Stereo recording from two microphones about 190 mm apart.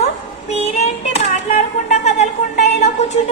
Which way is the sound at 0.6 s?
35° left (ahead or behind).